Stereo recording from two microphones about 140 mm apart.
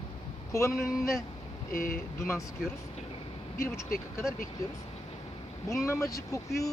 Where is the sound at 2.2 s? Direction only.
20° left (ahead or behind).